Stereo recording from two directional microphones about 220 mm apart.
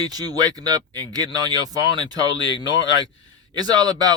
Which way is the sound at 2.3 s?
55° left (ahead or behind).